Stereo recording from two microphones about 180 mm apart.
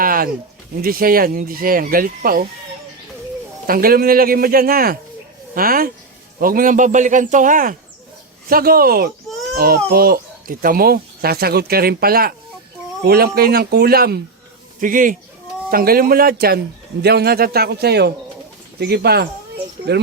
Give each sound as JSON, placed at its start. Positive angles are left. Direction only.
{"t": 0.0, "sound": "a sound", "side_deg": -50}
{"t": 0.8, "sound": "speech", "side_deg": -55}
{"t": 3.7, "sound": "speech", "side_deg": -55}
{"t": 9.3, "sound": "baby cry", "side_deg": 5}
{"t": 9.9, "sound": "speech", "side_deg": -55}
{"t": 14.8, "sound": "speech", "side_deg": -50}